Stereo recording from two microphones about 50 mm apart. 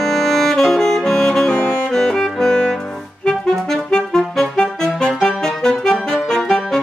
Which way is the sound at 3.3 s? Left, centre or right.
Centre.